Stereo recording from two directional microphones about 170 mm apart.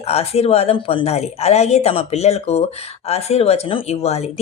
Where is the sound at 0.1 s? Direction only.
35° left (ahead or behind).